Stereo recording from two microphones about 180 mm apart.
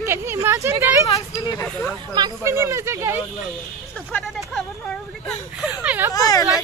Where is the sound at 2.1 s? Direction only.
20° right (ahead or behind).